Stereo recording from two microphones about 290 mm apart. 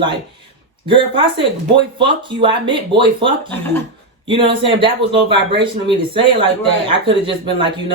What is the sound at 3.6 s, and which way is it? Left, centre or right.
Speech, centre.